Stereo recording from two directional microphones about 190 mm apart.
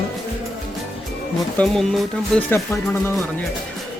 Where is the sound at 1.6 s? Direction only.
5° left (ahead or behind).